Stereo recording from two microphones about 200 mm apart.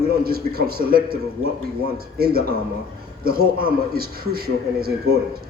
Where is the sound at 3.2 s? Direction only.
50° right (ahead or behind).